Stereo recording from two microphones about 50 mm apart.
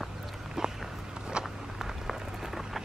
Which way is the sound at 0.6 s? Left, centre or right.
Centre.